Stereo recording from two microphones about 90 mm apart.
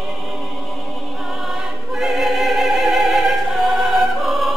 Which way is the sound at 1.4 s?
5° right (ahead or behind).